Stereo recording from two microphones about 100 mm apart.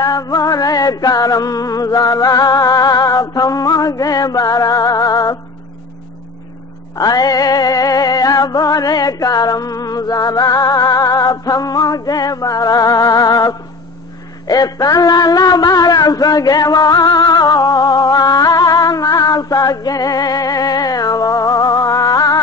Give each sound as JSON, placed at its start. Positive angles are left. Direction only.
{"t": 0.0, "sound": "music", "side_deg": 40}
{"t": 7.0, "sound": "music", "side_deg": 40}
{"t": 14.5, "sound": "a sound", "side_deg": 40}